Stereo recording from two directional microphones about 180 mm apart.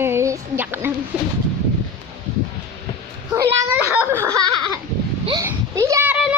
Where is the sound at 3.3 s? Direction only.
10° right (ahead or behind).